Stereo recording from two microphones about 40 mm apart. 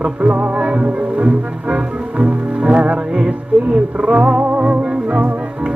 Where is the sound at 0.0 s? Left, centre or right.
Right.